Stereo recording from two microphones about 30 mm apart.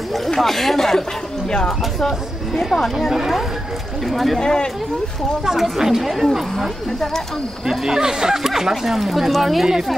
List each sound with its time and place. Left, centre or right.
0.4 s speech: centre
0.7 s speech: centre
1.5 s speech: left
2.0 s speech: centre
4.1 s speech: centre
4.4 s speech: left
5.8 s speech: centre
6.0 s speech: centre
7.6 s speech: centre